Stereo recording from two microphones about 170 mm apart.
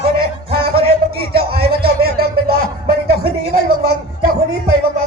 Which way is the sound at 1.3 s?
65° right (ahead or behind).